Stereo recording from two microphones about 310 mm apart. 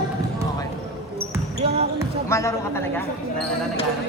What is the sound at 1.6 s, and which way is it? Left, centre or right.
Basketball bounce, centre.